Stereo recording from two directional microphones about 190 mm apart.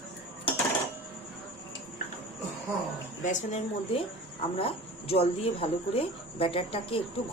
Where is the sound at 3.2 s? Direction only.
40° left (ahead or behind).